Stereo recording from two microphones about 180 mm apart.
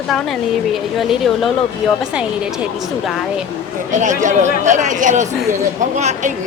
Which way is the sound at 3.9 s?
45° right (ahead or behind).